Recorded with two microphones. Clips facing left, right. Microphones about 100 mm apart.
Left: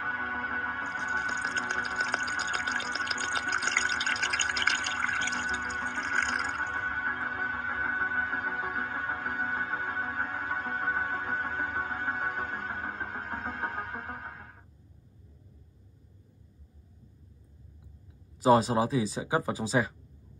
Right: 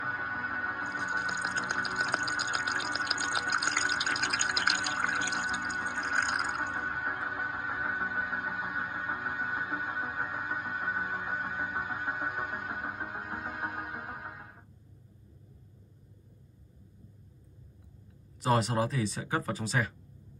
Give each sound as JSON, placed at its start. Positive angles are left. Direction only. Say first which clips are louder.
{"t": 0.0, "sound": "music", "louder": "left 2 dB", "side_deg": -15}
{"t": 18.4, "sound": "speech", "louder": "left 5 dB", "side_deg": 20}